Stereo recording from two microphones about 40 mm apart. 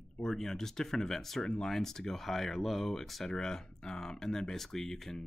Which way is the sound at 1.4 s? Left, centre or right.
Centre.